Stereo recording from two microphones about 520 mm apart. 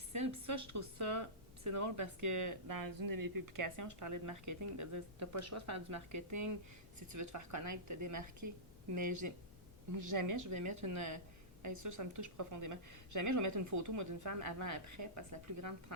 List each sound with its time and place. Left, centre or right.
0.1 s speech: right